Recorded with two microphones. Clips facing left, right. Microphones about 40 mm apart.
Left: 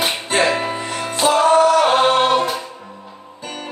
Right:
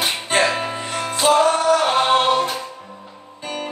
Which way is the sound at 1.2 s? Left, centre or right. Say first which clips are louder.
Even; centre.